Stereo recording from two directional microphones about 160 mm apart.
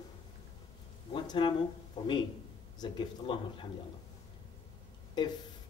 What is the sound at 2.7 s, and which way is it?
Speech, 30° left (ahead or behind).